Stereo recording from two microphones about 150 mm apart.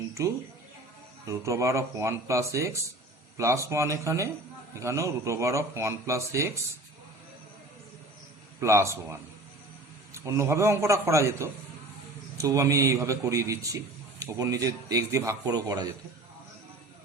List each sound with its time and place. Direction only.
0.1 s a man's voice: 20° right (ahead or behind)
8.6 s a man's voice: 20° right (ahead or behind)
10.2 s a man's voice: 20° right (ahead or behind)